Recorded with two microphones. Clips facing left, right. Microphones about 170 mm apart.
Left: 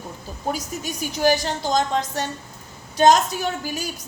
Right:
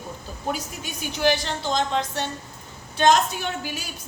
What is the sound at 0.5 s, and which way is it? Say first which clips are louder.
A woman's voice: left 3 dB; 40° left (ahead or behind).